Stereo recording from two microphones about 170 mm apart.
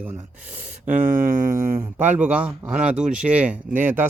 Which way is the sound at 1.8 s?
10° right (ahead or behind).